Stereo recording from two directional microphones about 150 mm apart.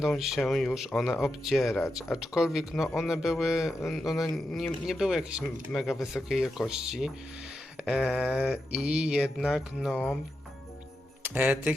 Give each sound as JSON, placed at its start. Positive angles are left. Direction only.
{"t": 0.0, "sound": "speech", "side_deg": 0}
{"t": 8.1, "sound": "speech", "side_deg": -5}
{"t": 11.2, "sound": "speech", "side_deg": -10}